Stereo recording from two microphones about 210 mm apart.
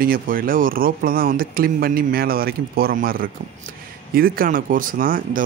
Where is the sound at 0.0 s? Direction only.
45° right (ahead or behind).